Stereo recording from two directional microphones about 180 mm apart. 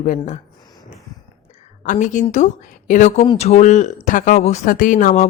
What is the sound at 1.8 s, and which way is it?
Speech, 45° left (ahead or behind).